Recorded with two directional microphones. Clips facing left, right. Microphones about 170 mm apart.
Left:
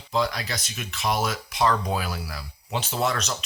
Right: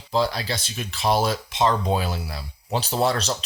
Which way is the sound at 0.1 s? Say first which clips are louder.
Right 3 dB; 30° right (ahead or behind).